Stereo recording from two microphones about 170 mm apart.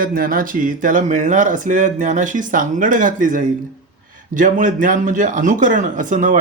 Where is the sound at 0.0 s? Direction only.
55° right (ahead or behind).